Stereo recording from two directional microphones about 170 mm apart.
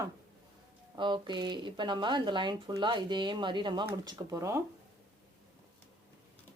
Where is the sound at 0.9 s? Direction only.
25° right (ahead or behind).